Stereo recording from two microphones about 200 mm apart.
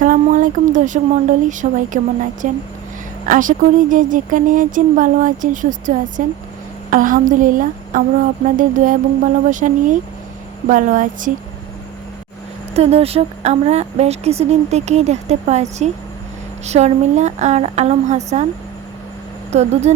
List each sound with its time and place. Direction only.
0.0 s speech: 40° right (ahead or behind)
12.7 s speech: 30° right (ahead or behind)
19.5 s speech: 35° right (ahead or behind)